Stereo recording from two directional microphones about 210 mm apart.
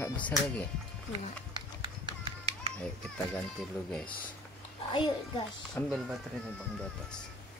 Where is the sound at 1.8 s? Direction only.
20° right (ahead or behind).